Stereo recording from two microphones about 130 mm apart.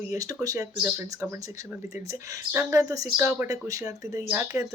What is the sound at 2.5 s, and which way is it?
Speech, 20° right (ahead or behind).